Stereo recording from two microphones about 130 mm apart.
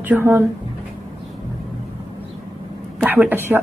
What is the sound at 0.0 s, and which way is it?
Speech, 15° right (ahead or behind).